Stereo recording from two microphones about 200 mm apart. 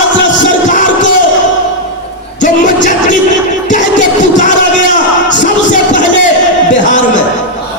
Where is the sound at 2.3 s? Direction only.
40° left (ahead or behind).